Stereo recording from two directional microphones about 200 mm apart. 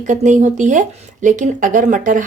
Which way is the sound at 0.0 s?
40° right (ahead or behind).